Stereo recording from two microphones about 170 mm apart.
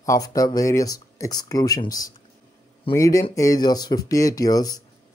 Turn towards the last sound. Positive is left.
turn(degrees=20)  # may be behind; listen again after turning